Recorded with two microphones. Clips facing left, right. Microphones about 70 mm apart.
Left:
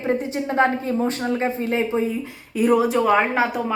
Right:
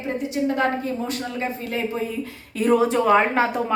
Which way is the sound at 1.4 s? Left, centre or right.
Left.